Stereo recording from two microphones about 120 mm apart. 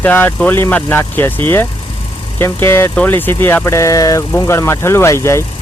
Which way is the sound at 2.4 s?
20° left (ahead or behind).